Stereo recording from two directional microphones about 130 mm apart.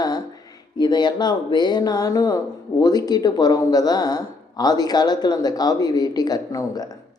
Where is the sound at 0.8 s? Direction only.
35° left (ahead or behind).